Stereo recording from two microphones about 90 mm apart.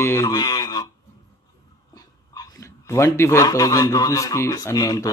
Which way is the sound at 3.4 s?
45° left (ahead or behind).